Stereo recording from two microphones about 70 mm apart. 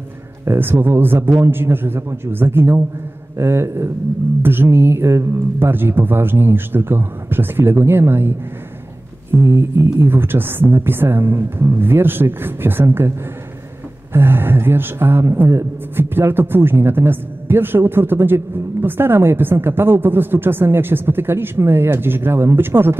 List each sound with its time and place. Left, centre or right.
0.5 s a man's voice: right
14.1 s a man's voice: right